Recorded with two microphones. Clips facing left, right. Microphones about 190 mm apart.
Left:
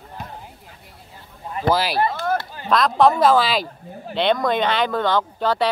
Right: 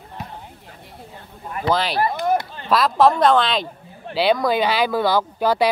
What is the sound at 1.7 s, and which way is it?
Speech, 5° left (ahead or behind).